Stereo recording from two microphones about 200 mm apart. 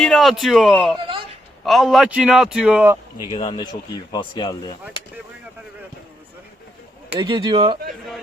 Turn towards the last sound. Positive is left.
turn(degrees=-25)  # may be behind; listen again after turning